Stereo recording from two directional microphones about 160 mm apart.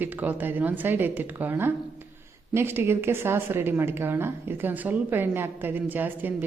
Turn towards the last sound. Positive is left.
turn(degrees=-10)  # may be behind; listen again after turning